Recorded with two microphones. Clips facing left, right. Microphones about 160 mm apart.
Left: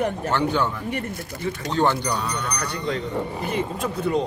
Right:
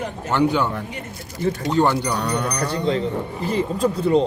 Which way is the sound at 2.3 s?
35° right (ahead or behind).